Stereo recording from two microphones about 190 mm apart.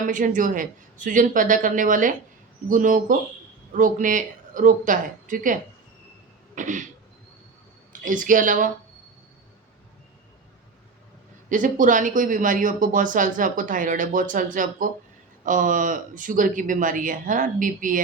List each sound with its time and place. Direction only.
0.0 s speech: 45° right (ahead or behind)
6.6 s cough: 40° right (ahead or behind)
8.0 s speech: 45° right (ahead or behind)
11.4 s speech: 45° right (ahead or behind)